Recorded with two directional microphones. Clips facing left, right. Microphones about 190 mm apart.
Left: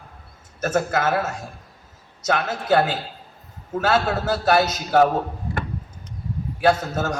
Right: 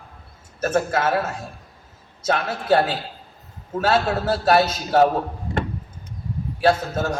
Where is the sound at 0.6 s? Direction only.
30° right (ahead or behind).